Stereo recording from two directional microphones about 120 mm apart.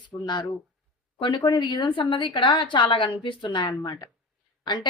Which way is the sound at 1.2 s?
35° left (ahead or behind).